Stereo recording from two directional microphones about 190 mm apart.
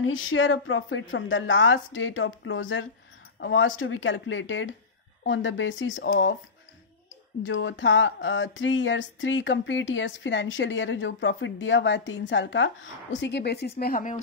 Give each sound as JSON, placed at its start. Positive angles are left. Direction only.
{"t": 0.0, "sound": "speech", "side_deg": 90}
{"t": 7.4, "sound": "speech", "side_deg": 90}